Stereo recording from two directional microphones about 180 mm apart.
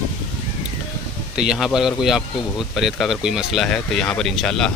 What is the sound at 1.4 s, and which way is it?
Speech, 5° right (ahead or behind).